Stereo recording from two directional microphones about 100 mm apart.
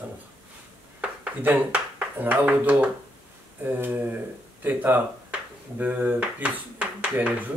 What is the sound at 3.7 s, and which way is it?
Speech, 20° right (ahead or behind).